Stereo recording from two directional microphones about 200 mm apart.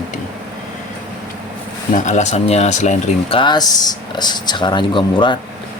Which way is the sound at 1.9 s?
35° left (ahead or behind).